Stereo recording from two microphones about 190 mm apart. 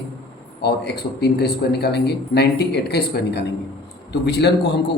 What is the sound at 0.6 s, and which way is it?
Speech, 60° left (ahead or behind).